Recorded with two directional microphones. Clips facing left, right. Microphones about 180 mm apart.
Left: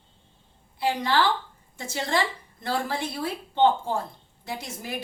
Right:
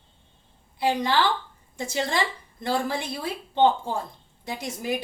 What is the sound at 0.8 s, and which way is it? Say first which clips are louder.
A woman's voice: right 1 dB; 15° right (ahead or behind).